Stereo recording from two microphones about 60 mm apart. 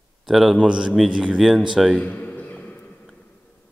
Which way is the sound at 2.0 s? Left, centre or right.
Left.